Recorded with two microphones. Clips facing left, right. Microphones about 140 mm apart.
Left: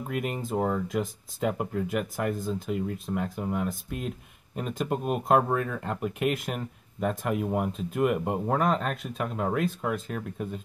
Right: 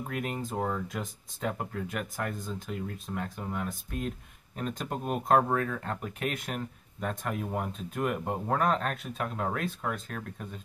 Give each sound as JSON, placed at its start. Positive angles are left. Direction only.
{"t": 0.1, "sound": "speech", "side_deg": 0}